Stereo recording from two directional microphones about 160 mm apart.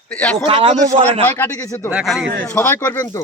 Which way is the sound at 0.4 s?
35° right (ahead or behind).